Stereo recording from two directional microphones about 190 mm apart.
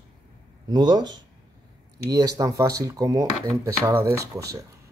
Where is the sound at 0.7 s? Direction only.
20° right (ahead or behind).